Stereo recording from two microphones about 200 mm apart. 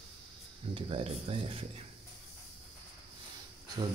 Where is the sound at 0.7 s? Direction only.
25° right (ahead or behind).